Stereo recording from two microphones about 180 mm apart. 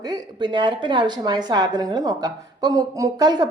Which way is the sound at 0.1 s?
25° right (ahead or behind).